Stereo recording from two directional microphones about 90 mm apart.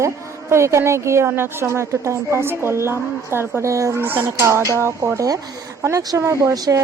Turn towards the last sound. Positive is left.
turn(degrees=-40)  # may be behind; listen again after turning